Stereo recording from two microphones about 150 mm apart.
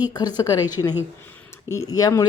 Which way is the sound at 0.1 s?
25° left (ahead or behind).